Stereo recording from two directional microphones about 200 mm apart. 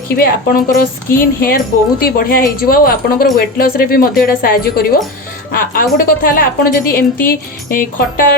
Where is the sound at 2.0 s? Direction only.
45° left (ahead or behind).